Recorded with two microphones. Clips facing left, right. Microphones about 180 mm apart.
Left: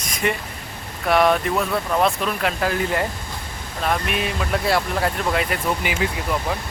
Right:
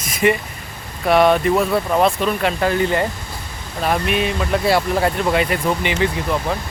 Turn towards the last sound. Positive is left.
turn(degrees=5)  # may be behind; listen again after turning